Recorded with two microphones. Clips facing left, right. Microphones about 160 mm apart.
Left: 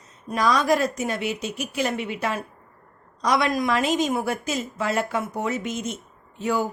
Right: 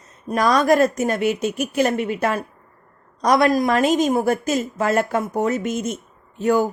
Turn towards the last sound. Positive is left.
turn(degrees=-45)  # may be behind; listen again after turning